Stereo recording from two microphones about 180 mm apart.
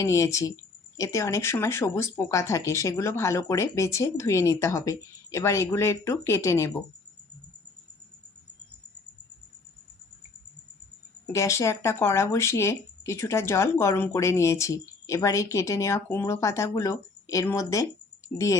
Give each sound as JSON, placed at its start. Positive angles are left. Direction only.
{"t": 0.0, "sound": "speech", "side_deg": 15}
{"t": 11.3, "sound": "speech", "side_deg": 15}